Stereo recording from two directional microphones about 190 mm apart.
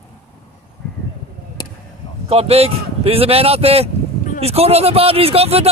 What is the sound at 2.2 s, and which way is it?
A man's voice, 30° right (ahead or behind).